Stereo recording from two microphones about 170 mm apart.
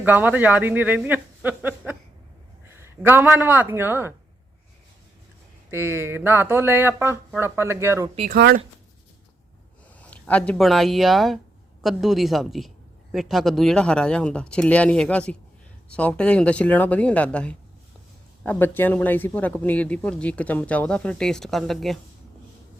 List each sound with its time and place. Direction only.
0.0 s speech: 10° right (ahead or behind)
5.7 s speech: 15° right (ahead or behind)
8.3 s speech: 65° right (ahead or behind)
10.0 s a woman's voice: 10° left (ahead or behind)